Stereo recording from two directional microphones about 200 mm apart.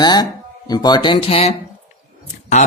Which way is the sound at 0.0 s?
20° left (ahead or behind).